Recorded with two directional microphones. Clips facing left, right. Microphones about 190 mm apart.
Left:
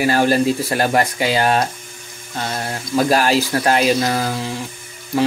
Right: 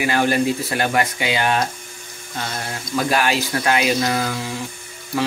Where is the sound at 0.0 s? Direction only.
35° left (ahead or behind).